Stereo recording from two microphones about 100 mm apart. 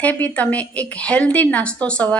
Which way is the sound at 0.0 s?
15° left (ahead or behind).